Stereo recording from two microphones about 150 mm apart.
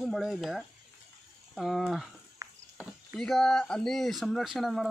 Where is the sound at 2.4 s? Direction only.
25° right (ahead or behind).